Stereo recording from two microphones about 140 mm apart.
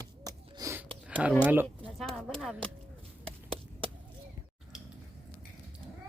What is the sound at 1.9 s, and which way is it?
Speech, 5° left (ahead or behind).